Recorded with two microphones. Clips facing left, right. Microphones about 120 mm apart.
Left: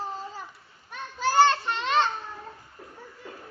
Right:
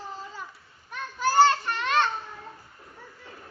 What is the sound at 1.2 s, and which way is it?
Child singing, 25° left (ahead or behind).